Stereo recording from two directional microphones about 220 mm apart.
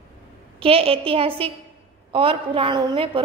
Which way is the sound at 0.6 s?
25° right (ahead or behind).